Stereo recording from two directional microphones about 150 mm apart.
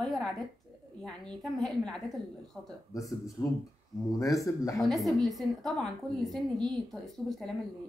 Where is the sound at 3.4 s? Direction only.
20° left (ahead or behind).